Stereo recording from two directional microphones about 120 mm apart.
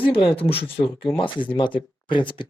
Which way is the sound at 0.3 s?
50° left (ahead or behind).